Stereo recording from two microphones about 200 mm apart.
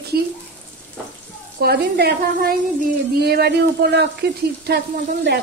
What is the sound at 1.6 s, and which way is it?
Speech, 50° right (ahead or behind).